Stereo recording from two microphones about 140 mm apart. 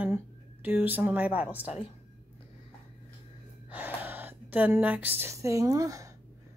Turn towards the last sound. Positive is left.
turn(degrees=-25)  # may be behind; listen again after turning